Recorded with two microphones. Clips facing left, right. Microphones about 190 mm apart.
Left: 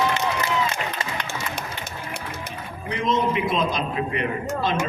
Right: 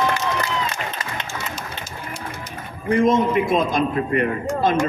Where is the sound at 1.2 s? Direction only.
65° left (ahead or behind).